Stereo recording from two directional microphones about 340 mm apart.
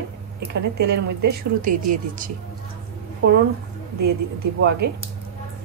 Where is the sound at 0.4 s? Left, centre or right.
Right.